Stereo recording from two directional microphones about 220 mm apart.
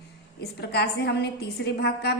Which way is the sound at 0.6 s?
50° left (ahead or behind).